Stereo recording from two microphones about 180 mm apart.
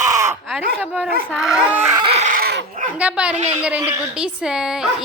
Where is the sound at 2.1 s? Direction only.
45° right (ahead or behind).